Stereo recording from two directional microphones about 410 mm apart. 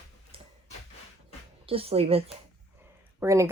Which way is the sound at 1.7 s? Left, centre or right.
Centre.